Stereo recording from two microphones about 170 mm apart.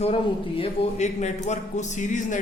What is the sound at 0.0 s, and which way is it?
A man's voice, 35° left (ahead or behind).